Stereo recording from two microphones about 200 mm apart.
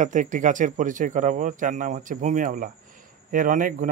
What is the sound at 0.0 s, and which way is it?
Speech, 40° right (ahead or behind).